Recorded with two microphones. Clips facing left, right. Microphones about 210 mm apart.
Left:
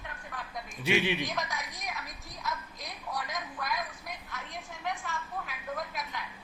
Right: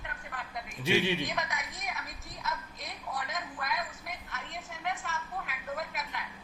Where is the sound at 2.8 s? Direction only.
Centre (ahead or behind).